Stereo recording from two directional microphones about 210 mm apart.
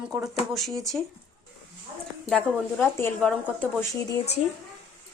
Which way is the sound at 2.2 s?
5° left (ahead or behind).